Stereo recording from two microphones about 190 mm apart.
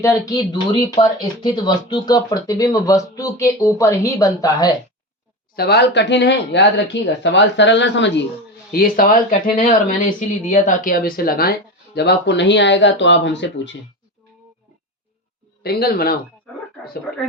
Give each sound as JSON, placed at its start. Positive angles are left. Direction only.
{"t": 0.0, "sound": "speech", "side_deg": 15}
{"t": 5.5, "sound": "speech", "side_deg": 60}
{"t": 8.7, "sound": "speech", "side_deg": 50}
{"t": 15.6, "sound": "speech", "side_deg": 55}